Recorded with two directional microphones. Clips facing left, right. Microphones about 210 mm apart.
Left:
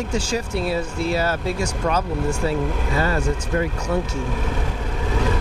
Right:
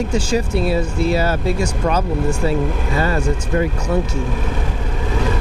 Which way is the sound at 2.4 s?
10° right (ahead or behind).